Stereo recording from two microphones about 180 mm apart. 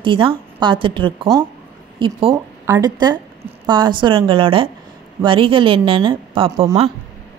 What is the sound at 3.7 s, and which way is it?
A woman's voice, 25° right (ahead or behind).